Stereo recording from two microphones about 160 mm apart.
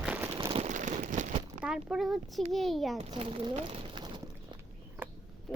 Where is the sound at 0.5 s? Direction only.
45° right (ahead or behind).